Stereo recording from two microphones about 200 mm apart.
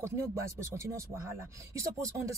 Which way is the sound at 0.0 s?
15° right (ahead or behind).